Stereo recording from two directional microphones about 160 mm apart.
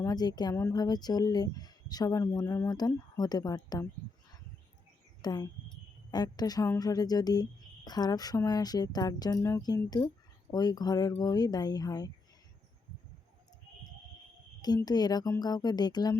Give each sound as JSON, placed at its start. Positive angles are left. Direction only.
{"t": 0.0, "sound": "a woman's voice", "side_deg": 25}
{"t": 5.2, "sound": "a woman's voice", "side_deg": 25}
{"t": 14.6, "sound": "a woman's voice", "side_deg": 25}